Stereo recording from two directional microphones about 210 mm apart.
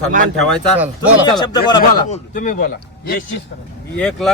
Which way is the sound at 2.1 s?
40° left (ahead or behind).